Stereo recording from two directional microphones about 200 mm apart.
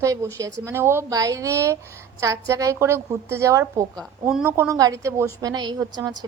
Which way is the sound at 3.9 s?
Centre (ahead or behind).